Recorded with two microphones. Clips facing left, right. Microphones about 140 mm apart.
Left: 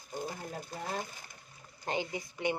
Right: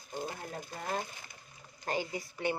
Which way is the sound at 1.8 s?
20° left (ahead or behind).